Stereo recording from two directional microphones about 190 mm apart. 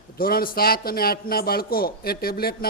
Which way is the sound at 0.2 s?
50° left (ahead or behind).